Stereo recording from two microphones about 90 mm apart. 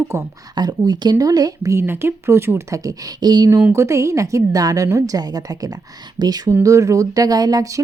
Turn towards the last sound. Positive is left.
turn(degrees=-40)  # may be behind; listen again after turning